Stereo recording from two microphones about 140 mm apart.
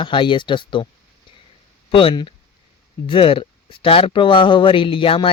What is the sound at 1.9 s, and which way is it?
Speech, 40° left (ahead or behind).